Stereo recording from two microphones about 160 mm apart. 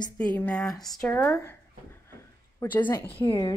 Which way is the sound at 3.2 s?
30° left (ahead or behind).